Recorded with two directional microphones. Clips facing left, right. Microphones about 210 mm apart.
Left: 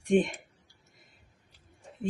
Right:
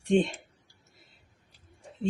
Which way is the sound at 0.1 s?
10° left (ahead or behind).